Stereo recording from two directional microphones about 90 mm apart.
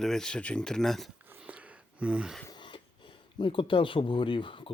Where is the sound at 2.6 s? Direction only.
65° left (ahead or behind).